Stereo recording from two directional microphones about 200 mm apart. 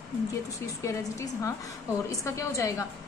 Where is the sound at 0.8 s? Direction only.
15° left (ahead or behind).